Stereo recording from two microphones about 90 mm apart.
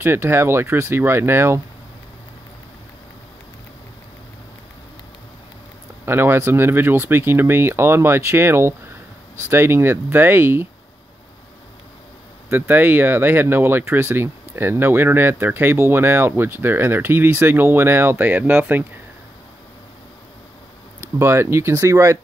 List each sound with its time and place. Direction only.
0.0 s speech: 25° right (ahead or behind)
6.0 s speech: 25° right (ahead or behind)
12.4 s speech: 20° right (ahead or behind)
21.2 s speech: 30° right (ahead or behind)